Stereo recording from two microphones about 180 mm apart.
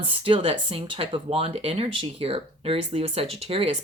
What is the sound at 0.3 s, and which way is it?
Speech, 30° right (ahead or behind).